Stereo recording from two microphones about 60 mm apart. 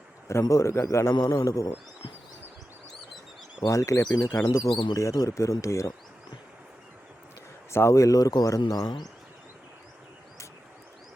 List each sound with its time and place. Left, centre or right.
0.4 s speech: left
3.6 s speech: left
7.7 s speech: left